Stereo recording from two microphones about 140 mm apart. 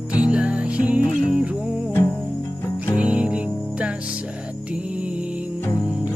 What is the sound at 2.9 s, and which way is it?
Music, 5° right (ahead or behind).